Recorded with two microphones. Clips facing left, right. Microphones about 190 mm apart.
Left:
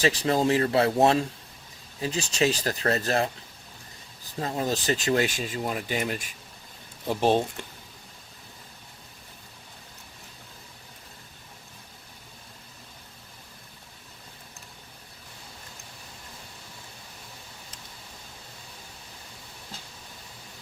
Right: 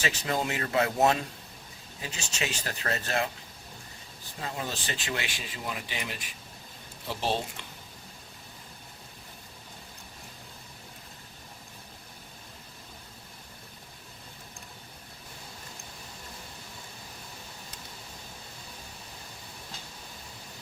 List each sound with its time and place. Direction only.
0.0 s speech: 35° left (ahead or behind)
4.4 s speech: 40° left (ahead or behind)